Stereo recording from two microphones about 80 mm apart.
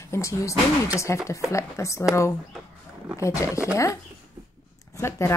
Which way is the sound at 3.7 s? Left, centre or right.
Left.